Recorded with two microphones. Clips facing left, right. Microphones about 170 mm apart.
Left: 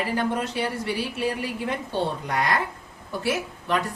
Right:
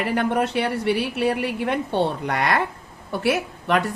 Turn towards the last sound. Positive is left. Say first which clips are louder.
# right 4 dB
turn(degrees=-65)  # may be behind; listen again after turning